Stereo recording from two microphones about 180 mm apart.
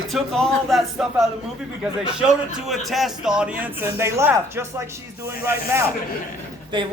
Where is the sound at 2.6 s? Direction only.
Centre (ahead or behind).